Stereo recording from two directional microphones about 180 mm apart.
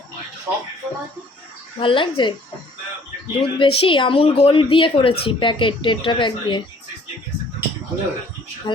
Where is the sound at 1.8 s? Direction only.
30° left (ahead or behind).